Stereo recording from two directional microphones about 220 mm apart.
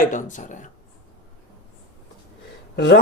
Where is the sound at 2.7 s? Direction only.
50° left (ahead or behind).